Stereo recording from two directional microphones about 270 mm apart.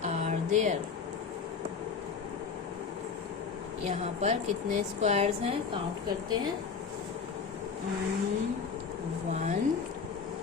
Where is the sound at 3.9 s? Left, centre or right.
Right.